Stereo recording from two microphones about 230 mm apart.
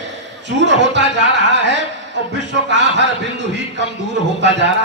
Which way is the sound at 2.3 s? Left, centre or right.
Right.